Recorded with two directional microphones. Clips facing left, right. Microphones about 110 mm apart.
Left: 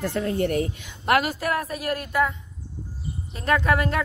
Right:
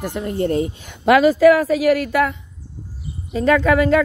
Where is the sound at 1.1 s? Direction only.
90° right.